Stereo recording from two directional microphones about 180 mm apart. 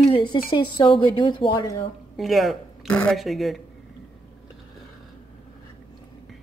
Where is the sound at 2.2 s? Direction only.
Centre (ahead or behind).